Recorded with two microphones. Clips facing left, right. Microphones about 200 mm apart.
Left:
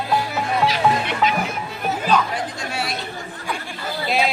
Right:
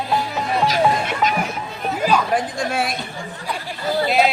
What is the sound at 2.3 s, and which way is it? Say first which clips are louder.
Speech: right 6 dB; 50° right (ahead or behind).